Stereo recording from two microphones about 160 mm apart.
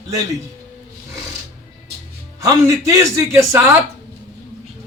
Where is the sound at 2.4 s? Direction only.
20° right (ahead or behind).